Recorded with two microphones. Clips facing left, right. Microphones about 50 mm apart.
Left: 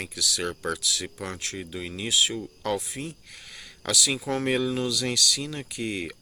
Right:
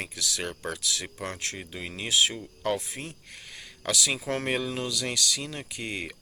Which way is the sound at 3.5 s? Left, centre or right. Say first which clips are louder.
Left 1 dB; centre.